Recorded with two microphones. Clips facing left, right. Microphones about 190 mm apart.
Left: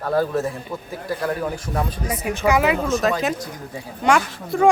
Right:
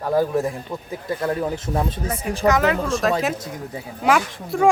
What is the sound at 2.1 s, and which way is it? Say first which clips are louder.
Speech: even; 10° left (ahead or behind).